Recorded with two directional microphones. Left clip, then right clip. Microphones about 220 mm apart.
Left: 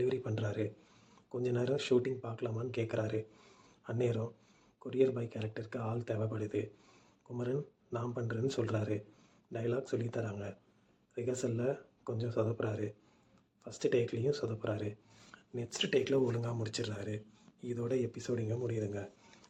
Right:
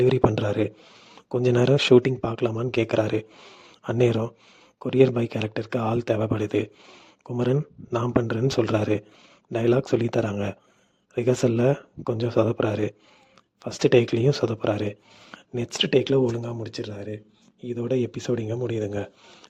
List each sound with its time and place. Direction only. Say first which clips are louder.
0.0 s speech: right 15 dB; 45° right (ahead or behind)